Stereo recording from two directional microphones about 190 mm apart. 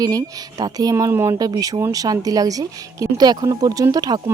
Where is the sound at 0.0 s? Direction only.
20° right (ahead or behind).